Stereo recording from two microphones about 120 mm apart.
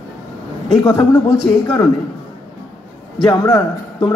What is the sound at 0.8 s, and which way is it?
Speech, 30° left (ahead or behind).